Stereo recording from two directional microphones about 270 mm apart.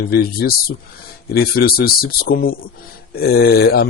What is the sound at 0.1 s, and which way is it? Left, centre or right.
Speech, left.